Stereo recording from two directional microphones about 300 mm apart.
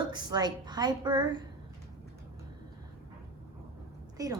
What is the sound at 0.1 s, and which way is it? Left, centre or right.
A woman's voice, centre.